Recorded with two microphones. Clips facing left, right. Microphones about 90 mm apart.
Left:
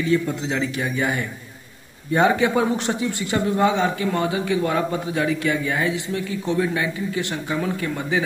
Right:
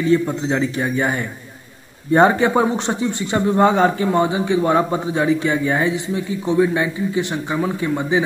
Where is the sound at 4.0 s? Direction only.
25° right (ahead or behind).